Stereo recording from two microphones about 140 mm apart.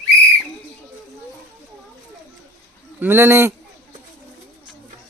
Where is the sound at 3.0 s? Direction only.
15° right (ahead or behind).